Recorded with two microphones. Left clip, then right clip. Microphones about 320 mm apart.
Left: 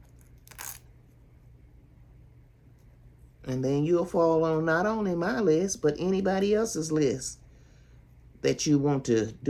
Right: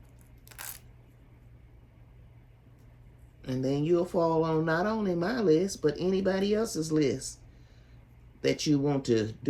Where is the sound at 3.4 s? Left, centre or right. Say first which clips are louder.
Left 2 dB; centre.